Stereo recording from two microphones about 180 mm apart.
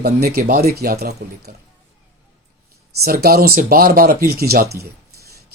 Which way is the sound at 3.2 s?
60° right (ahead or behind).